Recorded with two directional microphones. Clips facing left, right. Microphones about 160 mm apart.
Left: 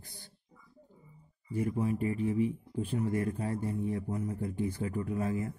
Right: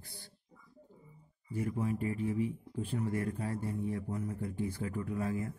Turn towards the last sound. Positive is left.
turn(degrees=20)  # may be behind; listen again after turning